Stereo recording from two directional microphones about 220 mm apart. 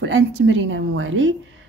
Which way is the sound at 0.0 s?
60° right (ahead or behind).